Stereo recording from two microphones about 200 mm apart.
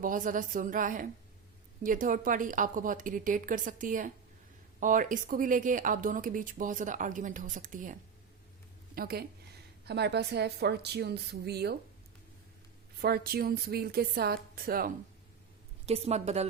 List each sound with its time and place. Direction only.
0.0 s speech: 40° right (ahead or behind)
9.0 s a woman's voice: 50° right (ahead or behind)
13.0 s a woman's voice: 50° right (ahead or behind)
15.9 s speech: 30° right (ahead or behind)